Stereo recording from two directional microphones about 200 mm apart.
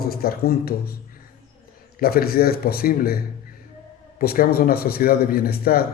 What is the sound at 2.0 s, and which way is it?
Speech, 50° left (ahead or behind).